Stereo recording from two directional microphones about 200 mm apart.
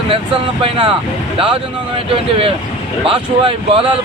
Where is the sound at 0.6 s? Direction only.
25° right (ahead or behind).